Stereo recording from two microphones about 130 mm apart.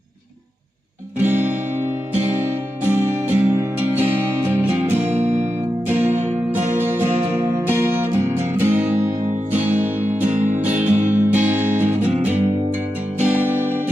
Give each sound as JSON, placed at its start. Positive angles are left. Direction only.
{"t": 1.2, "sound": "music", "side_deg": -15}
{"t": 2.9, "sound": "music", "side_deg": -20}
{"t": 5.1, "sound": "music", "side_deg": -50}
{"t": 5.9, "sound": "music", "side_deg": -15}